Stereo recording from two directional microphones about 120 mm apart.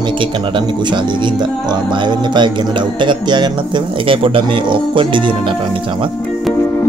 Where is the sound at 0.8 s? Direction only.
40° right (ahead or behind).